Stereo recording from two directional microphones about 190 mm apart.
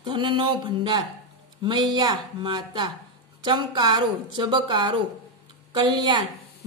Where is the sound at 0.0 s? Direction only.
25° right (ahead or behind).